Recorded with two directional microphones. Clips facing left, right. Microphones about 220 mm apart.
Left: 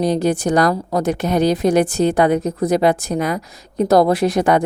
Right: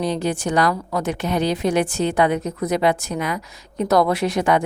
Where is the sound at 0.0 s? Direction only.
40° left (ahead or behind).